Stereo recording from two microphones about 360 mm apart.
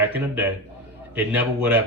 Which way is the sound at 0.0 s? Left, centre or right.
Centre.